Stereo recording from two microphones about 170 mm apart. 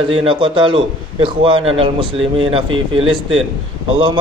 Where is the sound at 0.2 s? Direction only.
30° right (ahead or behind).